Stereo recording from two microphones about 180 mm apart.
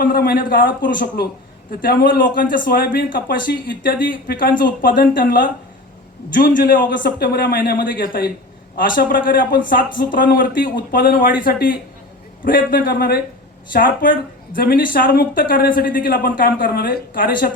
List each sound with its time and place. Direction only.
0.0 s speech: 55° left (ahead or behind)